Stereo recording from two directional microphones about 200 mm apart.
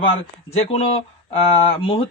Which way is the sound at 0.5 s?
30° left (ahead or behind).